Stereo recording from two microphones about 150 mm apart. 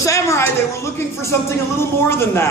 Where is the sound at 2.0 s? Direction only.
15° left (ahead or behind).